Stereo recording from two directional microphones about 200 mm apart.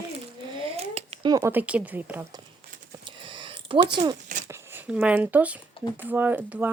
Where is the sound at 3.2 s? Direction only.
25° right (ahead or behind).